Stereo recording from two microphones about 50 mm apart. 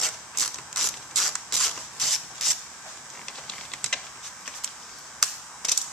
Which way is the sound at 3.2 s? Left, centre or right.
Centre.